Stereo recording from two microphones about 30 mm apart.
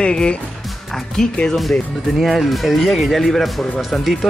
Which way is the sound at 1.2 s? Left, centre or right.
Centre.